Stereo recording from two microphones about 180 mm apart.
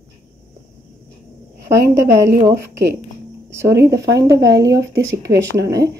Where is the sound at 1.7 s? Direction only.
15° right (ahead or behind).